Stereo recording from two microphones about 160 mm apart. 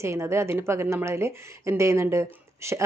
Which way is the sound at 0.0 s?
15° right (ahead or behind).